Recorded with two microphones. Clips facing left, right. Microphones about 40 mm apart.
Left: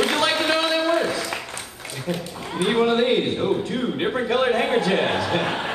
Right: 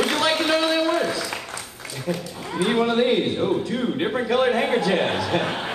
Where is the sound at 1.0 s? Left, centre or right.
Left.